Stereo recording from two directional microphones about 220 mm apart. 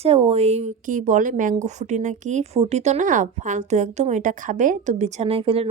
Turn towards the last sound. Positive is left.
turn(degrees=-25)  # may be behind; listen again after turning